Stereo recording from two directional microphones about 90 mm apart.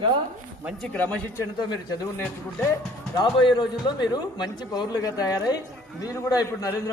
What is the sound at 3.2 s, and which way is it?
A man's voice, 55° left (ahead or behind).